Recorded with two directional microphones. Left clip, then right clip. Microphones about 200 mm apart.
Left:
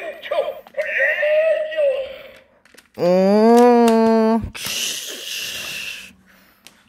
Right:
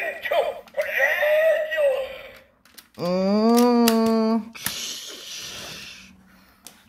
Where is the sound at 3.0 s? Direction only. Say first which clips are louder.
Left 8 dB; 40° left (ahead or behind).